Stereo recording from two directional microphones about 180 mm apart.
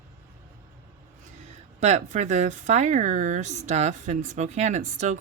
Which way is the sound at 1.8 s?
40° right (ahead or behind).